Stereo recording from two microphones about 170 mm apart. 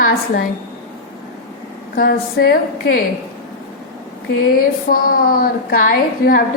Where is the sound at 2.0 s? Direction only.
60° left (ahead or behind).